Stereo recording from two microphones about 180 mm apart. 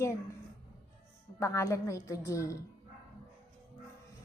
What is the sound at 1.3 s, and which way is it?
A woman's voice, 15° left (ahead or behind).